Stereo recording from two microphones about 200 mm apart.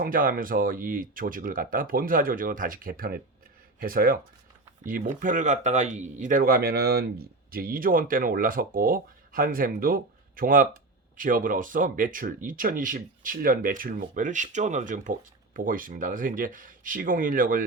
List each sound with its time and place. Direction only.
0.0 s speech: 45° right (ahead or behind)